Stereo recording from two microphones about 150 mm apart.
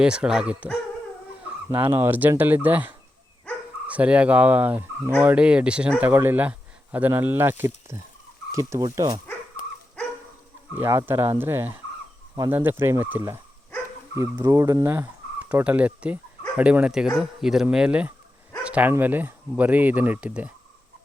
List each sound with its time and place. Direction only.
0.0 s speech: 5° right (ahead or behind)
1.7 s speech: 15° right (ahead or behind)
3.5 s dog: 10° left (ahead or behind)
3.8 s speech: 10° right (ahead or behind); by 9.2 s 25° right (ahead or behind)
10.8 s speech: 15° right (ahead or behind)
14.4 s speech: 20° right (ahead or behind)